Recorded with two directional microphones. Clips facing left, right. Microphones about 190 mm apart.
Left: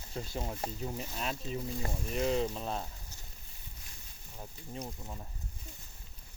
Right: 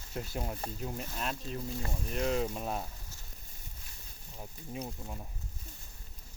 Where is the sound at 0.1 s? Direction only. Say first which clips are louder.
Right 1 dB; 5° right (ahead or behind).